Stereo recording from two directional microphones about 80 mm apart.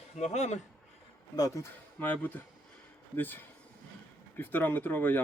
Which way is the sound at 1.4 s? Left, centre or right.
Left.